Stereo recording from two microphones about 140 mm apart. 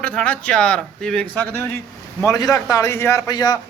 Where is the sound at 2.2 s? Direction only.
25° left (ahead or behind).